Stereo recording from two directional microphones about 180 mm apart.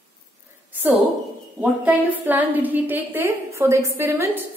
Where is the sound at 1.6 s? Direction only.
10° right (ahead or behind).